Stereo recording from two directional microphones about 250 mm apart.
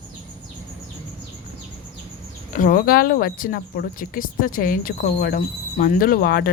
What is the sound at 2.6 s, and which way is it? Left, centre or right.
Speech, left.